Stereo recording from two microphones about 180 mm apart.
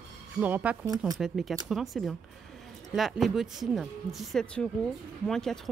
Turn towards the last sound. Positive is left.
turn(degrees=0)  # may be behind; listen again after turning